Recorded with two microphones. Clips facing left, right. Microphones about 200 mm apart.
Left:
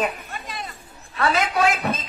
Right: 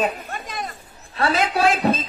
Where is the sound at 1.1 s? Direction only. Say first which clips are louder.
Right 1 dB; 30° right (ahead or behind).